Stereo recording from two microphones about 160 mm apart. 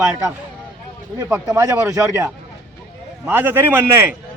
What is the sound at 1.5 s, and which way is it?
A man's voice, 20° right (ahead or behind).